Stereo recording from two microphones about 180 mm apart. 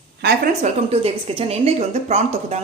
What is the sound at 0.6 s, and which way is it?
A woman's voice, 35° right (ahead or behind).